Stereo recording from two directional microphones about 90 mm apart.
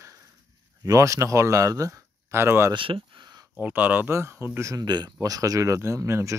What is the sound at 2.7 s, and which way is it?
Speech, 75° right (ahead or behind).